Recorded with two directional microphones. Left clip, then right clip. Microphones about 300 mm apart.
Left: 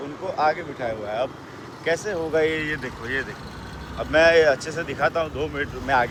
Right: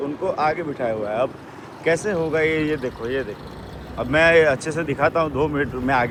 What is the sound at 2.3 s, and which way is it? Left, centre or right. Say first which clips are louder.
Speech: left 1 dB; centre.